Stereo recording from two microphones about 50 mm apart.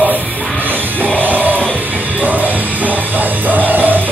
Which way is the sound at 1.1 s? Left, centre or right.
Right.